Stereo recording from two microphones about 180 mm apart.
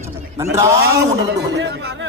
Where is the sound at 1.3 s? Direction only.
70° right (ahead or behind).